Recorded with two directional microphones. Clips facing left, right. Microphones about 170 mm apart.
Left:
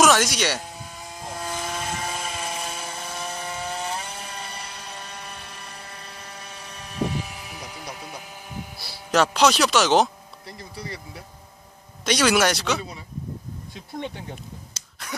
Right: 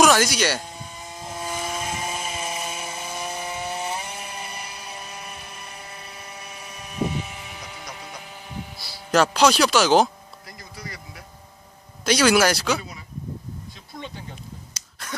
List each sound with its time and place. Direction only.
0.0 s vehicle: centre (ahead or behind)
9.1 s speech: centre (ahead or behind)
10.4 s speech: 30° left (ahead or behind)
12.0 s speech: centre (ahead or behind)
15.0 s a sound: centre (ahead or behind)